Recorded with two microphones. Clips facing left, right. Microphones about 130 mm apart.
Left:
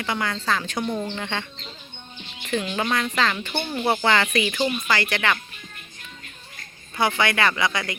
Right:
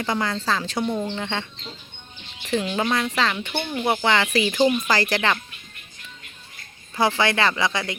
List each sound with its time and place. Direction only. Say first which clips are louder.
0.0 s speech: right 2 dB; 30° right (ahead or behind)
0.8 s speech: right 2 dB; 5° right (ahead or behind)
1.2 s speech: right 1 dB; 25° right (ahead or behind)
2.5 s speech: right 2 dB; 25° right (ahead or behind)
2.8 s speech: right 1 dB; 10° right (ahead or behind)
3.8 s speech: even; 10° right (ahead or behind); by 5.4 s 30° right (ahead or behind)
6.9 s speech: right 2 dB; 30° right (ahead or behind)